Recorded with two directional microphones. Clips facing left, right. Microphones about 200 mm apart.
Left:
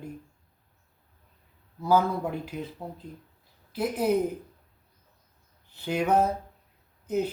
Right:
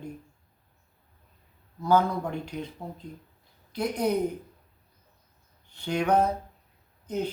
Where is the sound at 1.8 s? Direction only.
5° left (ahead or behind).